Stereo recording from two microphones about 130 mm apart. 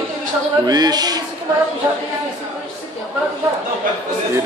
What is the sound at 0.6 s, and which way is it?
Speech, 30° right (ahead or behind).